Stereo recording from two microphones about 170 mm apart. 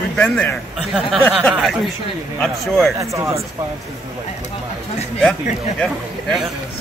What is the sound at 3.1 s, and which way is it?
Speech, 15° right (ahead or behind).